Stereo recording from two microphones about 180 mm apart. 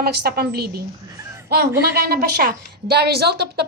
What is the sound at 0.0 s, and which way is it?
A woman's voice, 60° right (ahead or behind).